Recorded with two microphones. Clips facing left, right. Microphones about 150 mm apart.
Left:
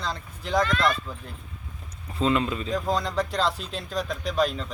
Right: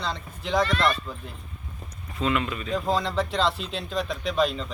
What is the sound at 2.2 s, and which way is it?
Speech, 30° left (ahead or behind).